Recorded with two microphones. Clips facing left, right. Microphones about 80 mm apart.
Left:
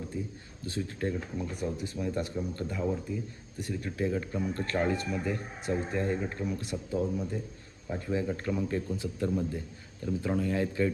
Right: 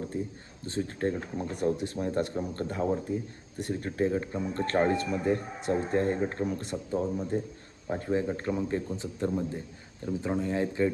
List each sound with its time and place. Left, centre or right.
0.1 s a man's voice: right
0.6 s speech: right
4.5 s a man's voice: right
7.9 s speech: right
8.3 s speech: right